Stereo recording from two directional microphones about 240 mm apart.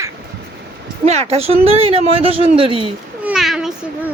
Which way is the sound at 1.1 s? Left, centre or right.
Right.